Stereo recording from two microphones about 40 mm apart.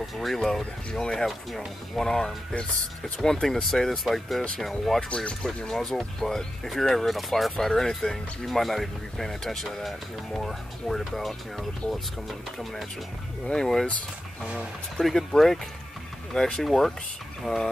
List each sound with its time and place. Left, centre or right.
0.0 s speech: centre
5.1 s speech: left
5.7 s speech: centre
7.6 s speech: centre
13.5 s speech: centre
15.0 s speech: centre